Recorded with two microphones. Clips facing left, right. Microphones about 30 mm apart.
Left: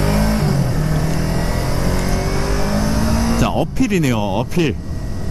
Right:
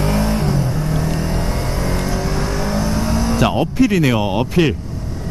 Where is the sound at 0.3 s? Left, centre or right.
Left.